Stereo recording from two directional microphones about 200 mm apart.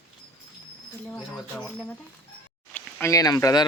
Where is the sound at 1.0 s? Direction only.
5° left (ahead or behind).